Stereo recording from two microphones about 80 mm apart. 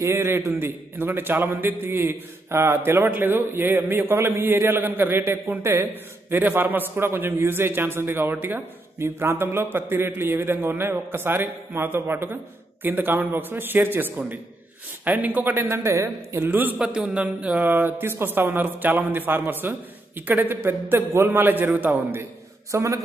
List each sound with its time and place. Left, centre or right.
0.0 s a man's voice: right
16.7 s a man's voice: centre
22.7 s a man's voice: right